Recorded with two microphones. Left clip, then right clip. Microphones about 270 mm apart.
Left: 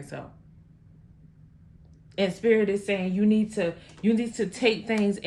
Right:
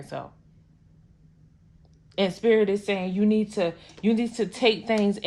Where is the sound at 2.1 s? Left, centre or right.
Right.